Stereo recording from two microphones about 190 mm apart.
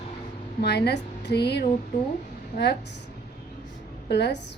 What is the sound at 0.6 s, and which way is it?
A woman's voice, 60° left (ahead or behind).